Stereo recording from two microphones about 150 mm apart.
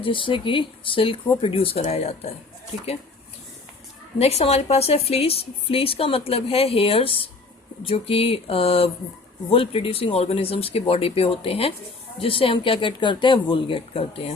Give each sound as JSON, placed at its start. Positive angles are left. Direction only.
{"t": 0.0, "sound": "a woman's voice", "side_deg": 35}
{"t": 4.2, "sound": "a woman's voice", "side_deg": 45}